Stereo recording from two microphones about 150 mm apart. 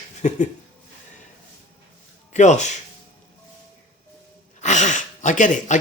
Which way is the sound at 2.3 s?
50° left (ahead or behind).